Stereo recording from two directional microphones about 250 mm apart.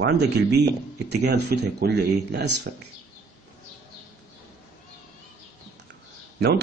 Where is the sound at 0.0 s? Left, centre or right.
Right.